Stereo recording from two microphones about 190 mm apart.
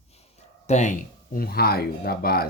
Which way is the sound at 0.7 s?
40° left (ahead or behind).